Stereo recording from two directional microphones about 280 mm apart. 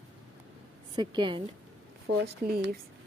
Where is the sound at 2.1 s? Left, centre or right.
Right.